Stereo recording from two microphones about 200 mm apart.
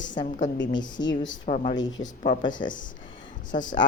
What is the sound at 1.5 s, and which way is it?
Speech, 35° left (ahead or behind).